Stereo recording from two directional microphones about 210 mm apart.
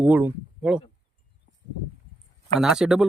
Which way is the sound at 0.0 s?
10° right (ahead or behind).